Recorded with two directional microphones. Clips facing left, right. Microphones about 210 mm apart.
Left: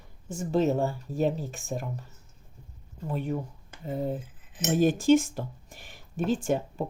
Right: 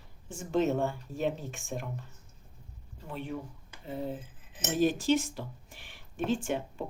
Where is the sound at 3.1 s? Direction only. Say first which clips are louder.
Left 6 dB; 45° left (ahead or behind).